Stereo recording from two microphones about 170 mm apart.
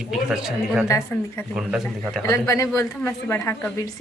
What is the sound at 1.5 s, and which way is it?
Speech, centre (ahead or behind).